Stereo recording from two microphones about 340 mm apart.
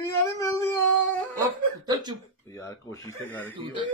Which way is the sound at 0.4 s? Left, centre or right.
Centre.